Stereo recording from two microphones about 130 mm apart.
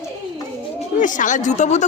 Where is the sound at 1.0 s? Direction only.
80° left; by 1.8 s 65° left (ahead or behind).